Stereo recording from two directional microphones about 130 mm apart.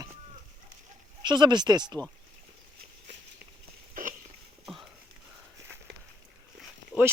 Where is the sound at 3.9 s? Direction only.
90° right.